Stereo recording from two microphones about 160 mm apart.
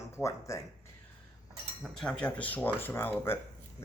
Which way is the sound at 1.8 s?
5° left (ahead or behind).